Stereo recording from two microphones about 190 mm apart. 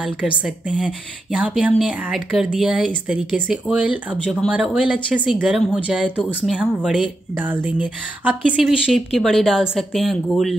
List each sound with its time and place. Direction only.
0.0 s speech: 5° right (ahead or behind)